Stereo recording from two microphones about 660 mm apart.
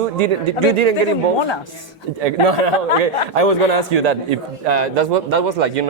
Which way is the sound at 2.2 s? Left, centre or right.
Right.